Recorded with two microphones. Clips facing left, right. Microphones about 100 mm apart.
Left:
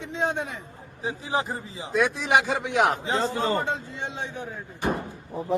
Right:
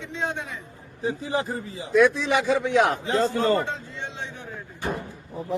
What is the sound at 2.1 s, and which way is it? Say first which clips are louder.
Speech: even; 55° left (ahead or behind).